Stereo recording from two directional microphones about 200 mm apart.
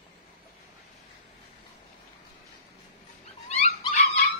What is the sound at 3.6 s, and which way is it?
Dog, 35° left (ahead or behind).